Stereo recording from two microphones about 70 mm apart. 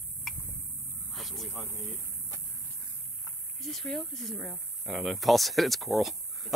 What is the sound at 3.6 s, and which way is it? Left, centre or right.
Speech, centre.